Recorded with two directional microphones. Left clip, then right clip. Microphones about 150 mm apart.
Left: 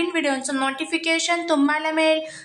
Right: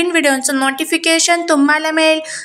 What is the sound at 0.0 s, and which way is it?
A woman's voice, 25° right (ahead or behind).